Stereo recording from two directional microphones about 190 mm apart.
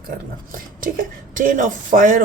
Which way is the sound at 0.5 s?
45° right (ahead or behind).